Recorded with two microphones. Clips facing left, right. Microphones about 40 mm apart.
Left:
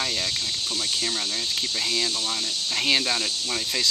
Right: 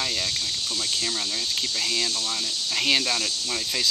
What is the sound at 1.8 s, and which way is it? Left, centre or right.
Speech, centre.